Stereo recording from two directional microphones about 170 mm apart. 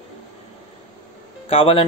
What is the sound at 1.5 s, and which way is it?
Speech, 35° left (ahead or behind).